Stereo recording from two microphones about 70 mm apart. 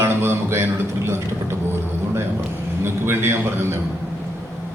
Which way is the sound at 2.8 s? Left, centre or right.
Right.